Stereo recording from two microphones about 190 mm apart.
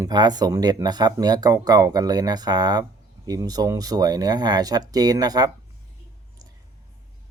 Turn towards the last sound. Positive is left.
turn(degrees=-20)  # may be behind; listen again after turning